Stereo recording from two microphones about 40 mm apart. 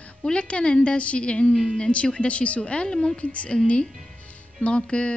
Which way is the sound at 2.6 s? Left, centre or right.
Left.